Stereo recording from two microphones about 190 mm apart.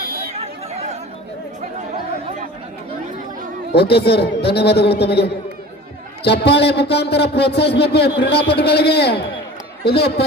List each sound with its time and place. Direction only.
3.7 s a man's voice: 60° left (ahead or behind)